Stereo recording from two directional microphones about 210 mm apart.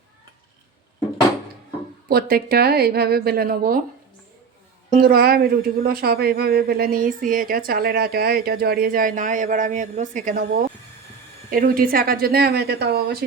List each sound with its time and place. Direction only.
2.0 s speech: 45° right (ahead or behind)
4.9 s speech: 45° right (ahead or behind)